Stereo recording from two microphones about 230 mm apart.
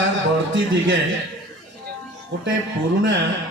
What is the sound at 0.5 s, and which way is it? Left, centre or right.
Speech, right.